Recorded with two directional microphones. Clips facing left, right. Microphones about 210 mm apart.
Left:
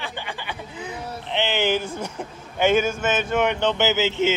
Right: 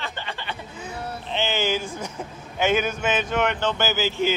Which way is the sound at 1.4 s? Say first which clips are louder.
Left 2 dB; 65° left (ahead or behind).